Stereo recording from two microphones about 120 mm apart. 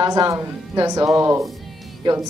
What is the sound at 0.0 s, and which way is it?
Speech, 30° right (ahead or behind).